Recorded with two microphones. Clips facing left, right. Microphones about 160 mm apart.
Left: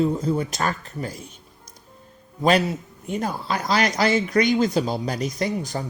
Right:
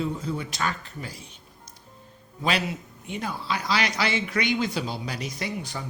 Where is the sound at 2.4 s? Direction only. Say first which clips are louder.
Left 8 dB; 45° left (ahead or behind).